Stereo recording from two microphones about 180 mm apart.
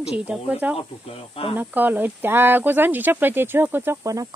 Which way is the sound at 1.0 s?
30° left (ahead or behind).